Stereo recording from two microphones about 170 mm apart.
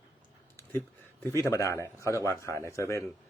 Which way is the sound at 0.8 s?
15° left (ahead or behind).